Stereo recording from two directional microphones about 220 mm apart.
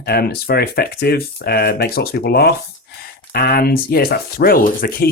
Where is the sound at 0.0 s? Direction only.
45° left (ahead or behind).